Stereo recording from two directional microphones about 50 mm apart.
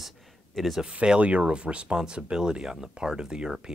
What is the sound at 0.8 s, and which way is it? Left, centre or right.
Speech, centre.